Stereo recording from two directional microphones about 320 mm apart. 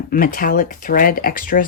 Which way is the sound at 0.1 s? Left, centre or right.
Left.